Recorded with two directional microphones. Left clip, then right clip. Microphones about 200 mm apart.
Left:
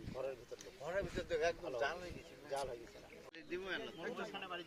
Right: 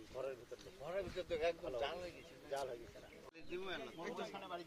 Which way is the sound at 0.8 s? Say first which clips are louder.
Left 2 dB; 20° left (ahead or behind).